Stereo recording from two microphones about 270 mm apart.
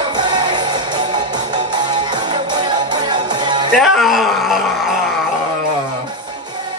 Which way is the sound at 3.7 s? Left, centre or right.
Centre.